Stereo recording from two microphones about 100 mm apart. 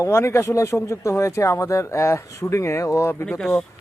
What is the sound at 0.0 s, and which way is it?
A man's voice, 30° left (ahead or behind).